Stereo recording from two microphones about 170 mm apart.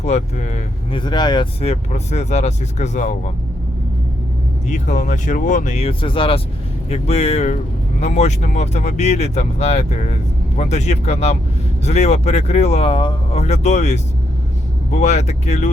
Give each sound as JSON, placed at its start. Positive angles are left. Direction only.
{"t": 0.0, "sound": "speech", "side_deg": 40}
{"t": 0.9, "sound": "speech", "side_deg": 25}
{"t": 1.6, "sound": "speech", "side_deg": 40}
{"t": 4.7, "sound": "speech", "side_deg": 45}